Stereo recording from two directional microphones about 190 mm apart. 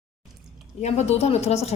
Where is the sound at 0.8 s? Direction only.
35° left (ahead or behind).